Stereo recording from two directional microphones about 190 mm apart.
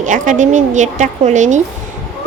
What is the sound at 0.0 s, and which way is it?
A woman's voice, 40° right (ahead or behind).